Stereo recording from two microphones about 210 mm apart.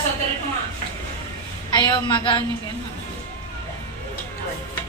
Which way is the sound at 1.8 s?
20° left (ahead or behind).